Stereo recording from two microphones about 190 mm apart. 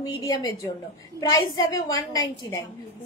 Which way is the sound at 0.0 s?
20° left (ahead or behind).